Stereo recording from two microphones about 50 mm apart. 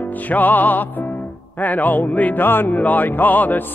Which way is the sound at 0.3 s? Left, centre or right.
Left.